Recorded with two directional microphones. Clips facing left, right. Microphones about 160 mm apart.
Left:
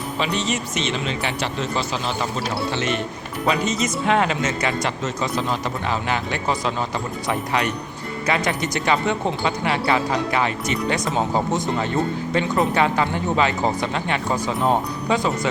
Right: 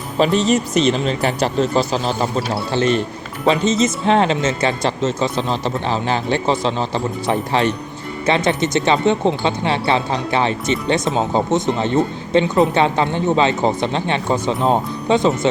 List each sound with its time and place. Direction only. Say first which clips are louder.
0.3 s speech: right 9 dB; 35° right (ahead or behind)